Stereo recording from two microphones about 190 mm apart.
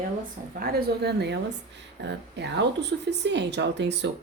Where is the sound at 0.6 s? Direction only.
55° right (ahead or behind).